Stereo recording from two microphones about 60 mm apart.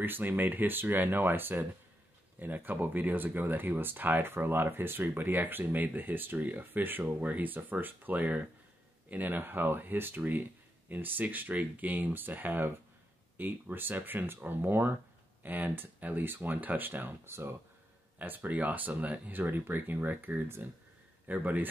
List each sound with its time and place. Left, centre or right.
0.0 s speech: right
18.2 s speech: right